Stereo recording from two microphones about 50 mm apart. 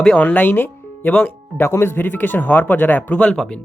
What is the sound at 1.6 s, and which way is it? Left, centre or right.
Speech, left.